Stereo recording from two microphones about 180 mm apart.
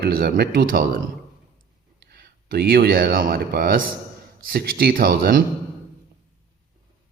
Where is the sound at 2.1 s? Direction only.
60° right (ahead or behind).